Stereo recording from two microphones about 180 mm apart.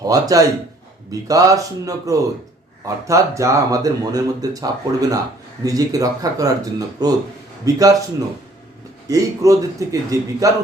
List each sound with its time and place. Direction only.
0.0 s speech: 20° right (ahead or behind)
9.0 s a man's voice: 20° right (ahead or behind)